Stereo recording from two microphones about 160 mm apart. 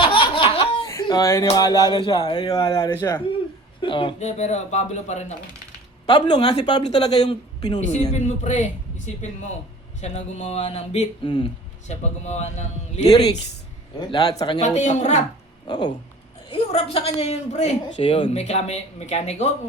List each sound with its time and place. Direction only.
0.0 s laughter: 30° left (ahead or behind)
1.0 s speech: 20° left (ahead or behind)
4.2 s speech: 45° left (ahead or behind)
6.1 s speech: 25° left (ahead or behind)
7.1 s speech: 40° left (ahead or behind)
10.0 s speech: 45° left (ahead or behind)
11.2 s speech: 30° left (ahead or behind)
11.9 s speech: 45° left (ahead or behind)
14.1 s speech: 25° left (ahead or behind)
14.6 s speech: 45° left (ahead or behind)
15.6 s speech: 25° left (ahead or behind)
16.5 s speech: 35° left (ahead or behind)